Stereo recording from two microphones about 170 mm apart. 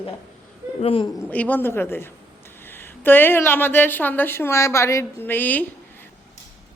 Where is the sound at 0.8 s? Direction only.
35° left (ahead or behind).